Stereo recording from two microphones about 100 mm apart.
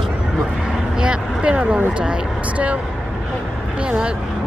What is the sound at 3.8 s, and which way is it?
Speech, 10° right (ahead or behind).